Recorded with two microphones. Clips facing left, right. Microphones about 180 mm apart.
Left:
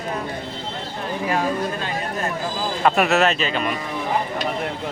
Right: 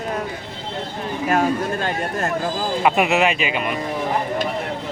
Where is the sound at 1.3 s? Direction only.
45° right (ahead or behind).